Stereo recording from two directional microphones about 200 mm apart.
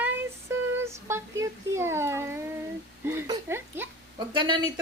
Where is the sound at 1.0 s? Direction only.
15° right (ahead or behind).